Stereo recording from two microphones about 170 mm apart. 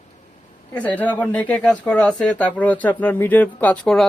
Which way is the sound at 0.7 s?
10° left (ahead or behind).